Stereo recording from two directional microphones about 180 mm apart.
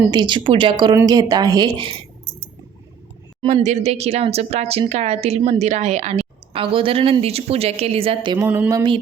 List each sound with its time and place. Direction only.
0.1 s a woman's voice: 25° right (ahead or behind)
3.4 s speech: 40° right (ahead or behind)
8.4 s a sound: 10° right (ahead or behind)
8.7 s a woman's voice: 25° right (ahead or behind)